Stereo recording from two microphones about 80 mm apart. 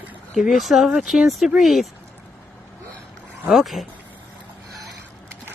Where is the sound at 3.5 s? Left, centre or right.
Centre.